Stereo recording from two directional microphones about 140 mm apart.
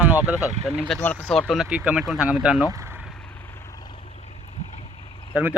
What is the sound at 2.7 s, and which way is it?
Speech, 20° right (ahead or behind).